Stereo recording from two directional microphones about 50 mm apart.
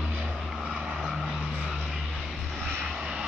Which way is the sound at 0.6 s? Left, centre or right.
Centre.